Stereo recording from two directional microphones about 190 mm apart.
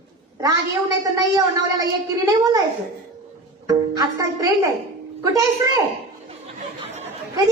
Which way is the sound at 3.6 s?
20° right (ahead or behind).